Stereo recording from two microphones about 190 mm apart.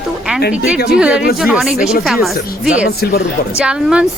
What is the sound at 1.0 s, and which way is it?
Speech, 5° right (ahead or behind).